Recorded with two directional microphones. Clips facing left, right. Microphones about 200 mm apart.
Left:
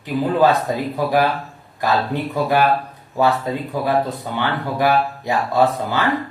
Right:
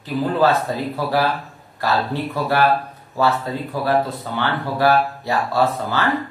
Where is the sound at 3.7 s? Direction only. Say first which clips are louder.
Right 1 dB; 15° left (ahead or behind).